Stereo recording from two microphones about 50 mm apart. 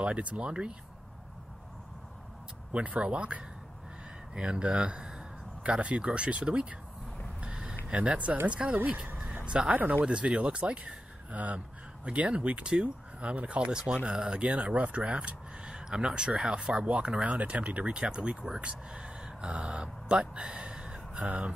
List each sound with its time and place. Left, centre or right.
0.0 s speech: right
2.7 s speech: right
7.3 s a sound: right
7.9 s speech: right
15.7 s speech: centre